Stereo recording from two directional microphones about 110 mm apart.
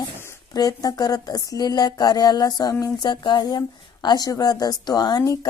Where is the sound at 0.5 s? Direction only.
35° left (ahead or behind).